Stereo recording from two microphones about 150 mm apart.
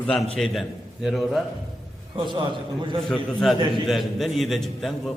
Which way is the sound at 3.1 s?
Centre (ahead or behind).